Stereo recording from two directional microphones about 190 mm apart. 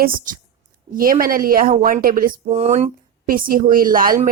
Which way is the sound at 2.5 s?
35° right (ahead or behind).